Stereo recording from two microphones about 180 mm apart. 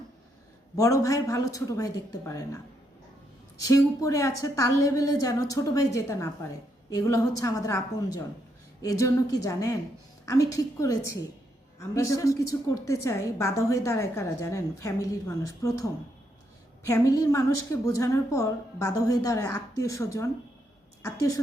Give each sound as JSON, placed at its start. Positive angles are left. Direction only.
{"t": 0.8, "sound": "a woman's voice", "side_deg": 20}
{"t": 3.6, "sound": "a woman's voice", "side_deg": 20}
{"t": 16.9, "sound": "a woman's voice", "side_deg": 20}